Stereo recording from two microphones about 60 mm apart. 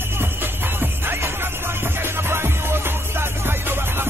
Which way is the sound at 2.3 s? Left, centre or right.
Right.